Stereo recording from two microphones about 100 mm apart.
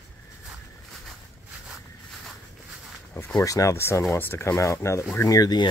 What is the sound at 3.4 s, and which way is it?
Speech, 35° left (ahead or behind).